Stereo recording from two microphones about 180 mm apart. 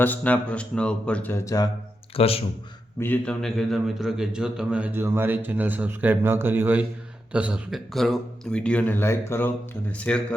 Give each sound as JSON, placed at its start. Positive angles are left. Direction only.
{"t": 0.0, "sound": "speech", "side_deg": 10}
{"t": 2.1, "sound": "a man's voice", "side_deg": 30}
{"t": 3.0, "sound": "a man's voice", "side_deg": 10}